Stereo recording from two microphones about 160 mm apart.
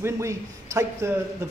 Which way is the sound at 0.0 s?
20° right (ahead or behind).